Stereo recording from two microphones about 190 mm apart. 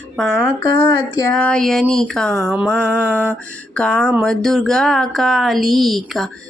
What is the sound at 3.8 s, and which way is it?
Speech, 5° left (ahead or behind).